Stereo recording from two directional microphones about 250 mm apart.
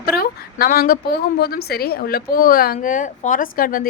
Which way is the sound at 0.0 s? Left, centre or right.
Left.